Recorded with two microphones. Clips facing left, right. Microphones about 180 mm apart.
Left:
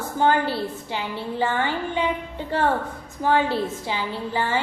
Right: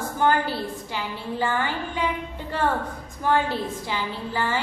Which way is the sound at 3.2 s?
15° left (ahead or behind).